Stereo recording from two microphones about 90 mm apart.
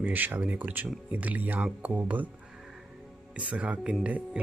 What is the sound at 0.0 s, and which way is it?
Speech, 20° right (ahead or behind).